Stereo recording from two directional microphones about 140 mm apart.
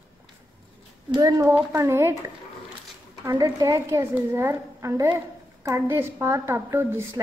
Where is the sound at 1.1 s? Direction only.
25° right (ahead or behind).